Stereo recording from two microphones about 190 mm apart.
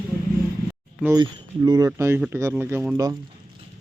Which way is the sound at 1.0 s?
20° right (ahead or behind).